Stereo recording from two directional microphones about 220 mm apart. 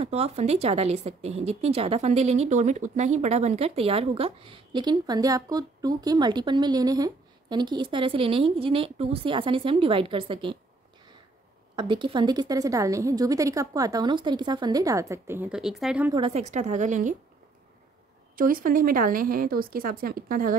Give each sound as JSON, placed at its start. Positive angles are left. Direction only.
{"t": 0.0, "sound": "a woman's voice", "side_deg": -30}
{"t": 11.7, "sound": "speech", "side_deg": -20}
{"t": 16.1, "sound": "a woman's voice", "side_deg": -25}
{"t": 18.3, "sound": "a woman's voice", "side_deg": -40}